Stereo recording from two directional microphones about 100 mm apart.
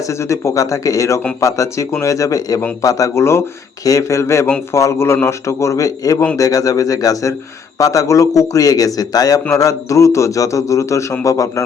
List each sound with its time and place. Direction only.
0.1 s a man's voice: 30° left (ahead or behind)